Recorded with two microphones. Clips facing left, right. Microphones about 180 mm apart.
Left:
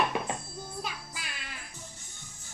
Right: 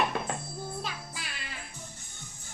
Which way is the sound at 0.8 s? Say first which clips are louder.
Right 1 dB; centre (ahead or behind).